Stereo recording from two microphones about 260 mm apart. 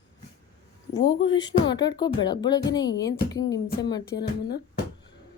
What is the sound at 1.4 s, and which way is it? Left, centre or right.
Speech, centre.